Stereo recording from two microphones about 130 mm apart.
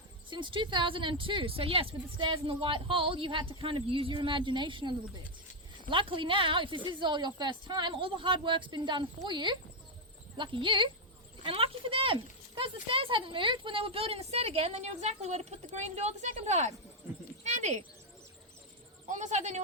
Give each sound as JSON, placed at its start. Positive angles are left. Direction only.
{"t": 0.3, "sound": "speech", "side_deg": -40}
{"t": 19.0, "sound": "a woman's voice", "side_deg": -70}